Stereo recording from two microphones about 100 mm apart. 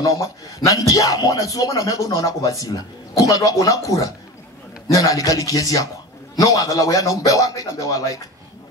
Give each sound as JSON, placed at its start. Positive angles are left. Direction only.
{"t": 0.0, "sound": "speech", "side_deg": 35}